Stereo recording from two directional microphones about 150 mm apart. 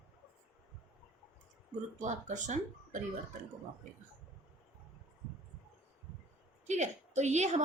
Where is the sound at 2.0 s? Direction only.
55° right (ahead or behind).